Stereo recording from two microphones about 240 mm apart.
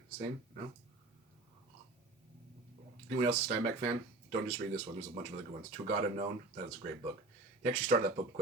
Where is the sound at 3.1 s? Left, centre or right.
Right.